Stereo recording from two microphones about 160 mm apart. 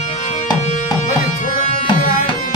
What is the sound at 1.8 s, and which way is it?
Tabla, 30° left (ahead or behind).